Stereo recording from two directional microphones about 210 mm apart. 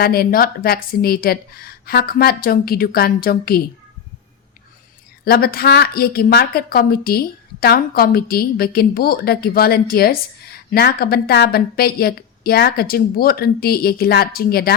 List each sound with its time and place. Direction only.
0.0 s a woman's voice: 45° left (ahead or behind)
5.2 s a woman's voice: 45° left (ahead or behind)